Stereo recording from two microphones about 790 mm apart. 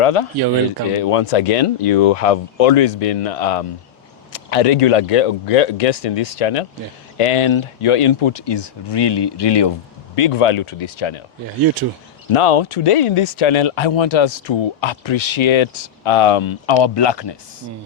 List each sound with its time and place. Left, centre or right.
0.0 s speech: left
12.3 s speech: left